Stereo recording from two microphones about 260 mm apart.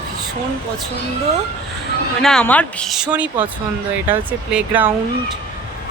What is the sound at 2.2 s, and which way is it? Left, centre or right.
Speech, centre.